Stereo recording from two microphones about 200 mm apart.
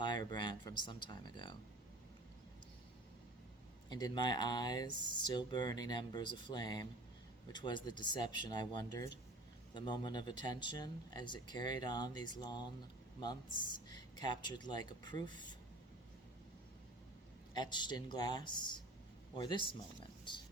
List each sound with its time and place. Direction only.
0.0 s speech: 20° left (ahead or behind)
3.8 s speech: 20° left (ahead or behind)
15.3 s speech: 40° right (ahead or behind)
17.5 s speech: 20° left (ahead or behind)